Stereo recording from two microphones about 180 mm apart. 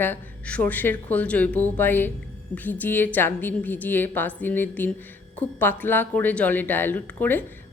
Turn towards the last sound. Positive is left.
turn(degrees=10)  # may be behind; listen again after turning